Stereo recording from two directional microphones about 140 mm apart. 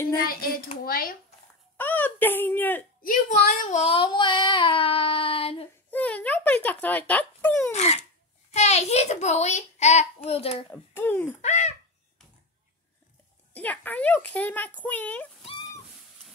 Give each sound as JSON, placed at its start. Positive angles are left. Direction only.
{"t": 0.1, "sound": "a child's voice", "side_deg": 90}
{"t": 1.8, "sound": "speech", "side_deg": 10}
{"t": 3.0, "sound": "a woman's voice", "side_deg": 85}
{"t": 3.7, "sound": "child singing", "side_deg": 45}
{"t": 5.9, "sound": "a sound", "side_deg": 10}
{"t": 7.7, "sound": "a sound", "side_deg": 50}
{"t": 8.5, "sound": "a child's voice", "side_deg": 50}
{"t": 10.7, "sound": "speech", "side_deg": 15}
{"t": 11.4, "sound": "speech", "side_deg": 55}
{"t": 13.5, "sound": "speech", "side_deg": 10}